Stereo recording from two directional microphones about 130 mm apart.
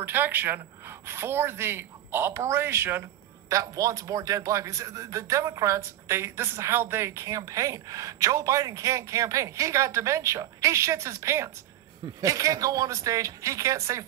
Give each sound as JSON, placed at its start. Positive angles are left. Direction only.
{"t": 0.0, "sound": "a woman's voice", "side_deg": -15}